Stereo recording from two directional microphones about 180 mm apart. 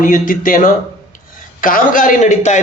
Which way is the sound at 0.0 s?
50° left (ahead or behind).